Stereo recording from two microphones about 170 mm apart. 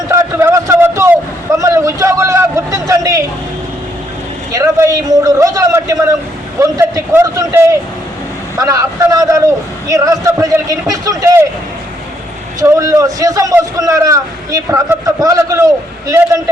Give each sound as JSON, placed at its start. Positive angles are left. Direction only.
{"t": 0.1, "sound": "a sound", "side_deg": -15}
{"t": 4.5, "sound": "a man's voice", "side_deg": -20}
{"t": 12.5, "sound": "a man's voice", "side_deg": -20}